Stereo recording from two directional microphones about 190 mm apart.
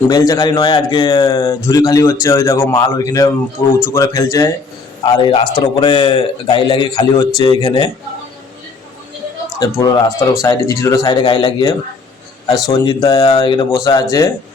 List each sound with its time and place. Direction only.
0.1 s a man's voice: 20° left (ahead or behind)
5.1 s speech: 25° left (ahead or behind)
9.6 s a man's voice: 20° left (ahead or behind)